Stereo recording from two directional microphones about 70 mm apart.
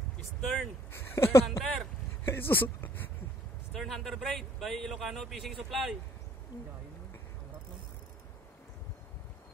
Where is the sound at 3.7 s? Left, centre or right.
Centre.